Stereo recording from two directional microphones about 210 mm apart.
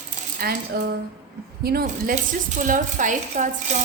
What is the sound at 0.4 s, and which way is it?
Speech, 45° right (ahead or behind).